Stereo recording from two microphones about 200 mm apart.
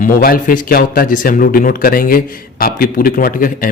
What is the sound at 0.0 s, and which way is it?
Speech, 45° left (ahead or behind).